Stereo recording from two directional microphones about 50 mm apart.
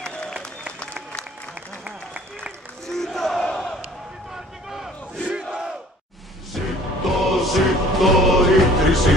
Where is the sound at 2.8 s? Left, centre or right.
Centre.